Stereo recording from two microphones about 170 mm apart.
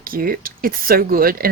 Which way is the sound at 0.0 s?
60° right (ahead or behind).